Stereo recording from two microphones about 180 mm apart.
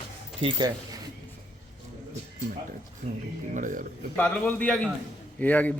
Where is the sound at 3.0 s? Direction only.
40° right (ahead or behind).